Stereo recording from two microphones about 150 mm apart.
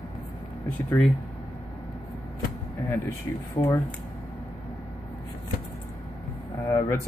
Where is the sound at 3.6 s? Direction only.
40° left (ahead or behind).